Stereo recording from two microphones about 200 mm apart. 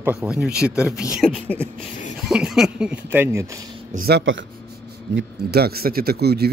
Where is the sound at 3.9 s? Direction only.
45° right (ahead or behind).